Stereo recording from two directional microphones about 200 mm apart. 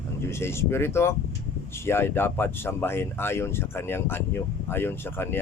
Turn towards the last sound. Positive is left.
turn(degrees=10)  # may be behind; listen again after turning